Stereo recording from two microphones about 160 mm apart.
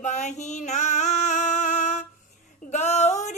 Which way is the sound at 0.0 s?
45° left (ahead or behind).